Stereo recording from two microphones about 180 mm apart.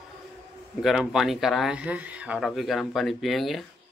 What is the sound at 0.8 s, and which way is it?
Speech, centre (ahead or behind).